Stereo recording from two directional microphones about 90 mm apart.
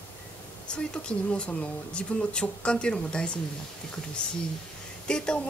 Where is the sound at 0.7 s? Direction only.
10° left (ahead or behind).